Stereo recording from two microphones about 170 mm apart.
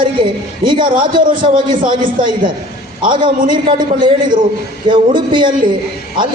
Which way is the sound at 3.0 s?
30° right (ahead or behind).